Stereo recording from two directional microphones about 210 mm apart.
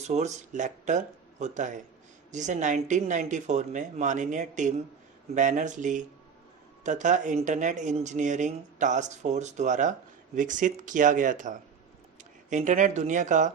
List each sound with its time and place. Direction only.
0.1 s speech: 35° right (ahead or behind)